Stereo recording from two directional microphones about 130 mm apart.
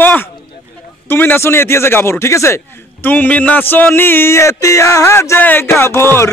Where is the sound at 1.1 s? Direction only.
15° left (ahead or behind).